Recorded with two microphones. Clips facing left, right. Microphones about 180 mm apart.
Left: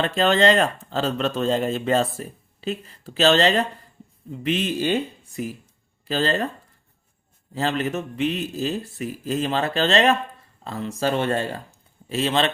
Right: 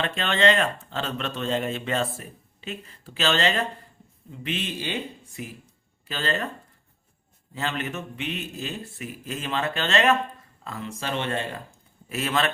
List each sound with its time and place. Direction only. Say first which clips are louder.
0.0 s speech: left 5 dB; 35° left (ahead or behind)
6.1 s speech: left 6 dB; 35° left (ahead or behind)
7.5 s speech: left 6 dB; 35° left (ahead or behind)
12.0 s a man's voice: left 4 dB; 30° left (ahead or behind)